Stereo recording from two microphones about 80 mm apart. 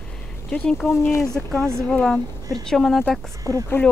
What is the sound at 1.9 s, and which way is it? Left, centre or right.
A woman's voice, centre.